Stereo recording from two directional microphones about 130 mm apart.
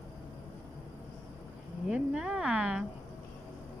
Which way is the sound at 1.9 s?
5° right (ahead or behind).